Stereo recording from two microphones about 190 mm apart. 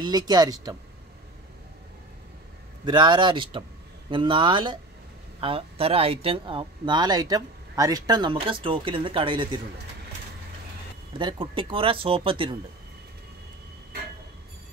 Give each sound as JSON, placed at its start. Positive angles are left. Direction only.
{"t": 0.0, "sound": "speech", "side_deg": -20}
{"t": 2.8, "sound": "speech", "side_deg": -25}
{"t": 11.1, "sound": "speech", "side_deg": -25}